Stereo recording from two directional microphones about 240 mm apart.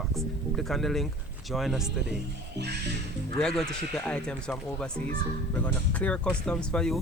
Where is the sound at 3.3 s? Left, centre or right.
Centre.